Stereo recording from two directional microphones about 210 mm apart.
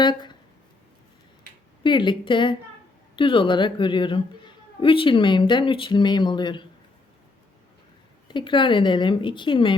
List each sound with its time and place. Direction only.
0.0 s speech: 20° left (ahead or behind)
1.8 s a woman's voice: 20° left (ahead or behind)
8.3 s a woman's voice: 20° left (ahead or behind)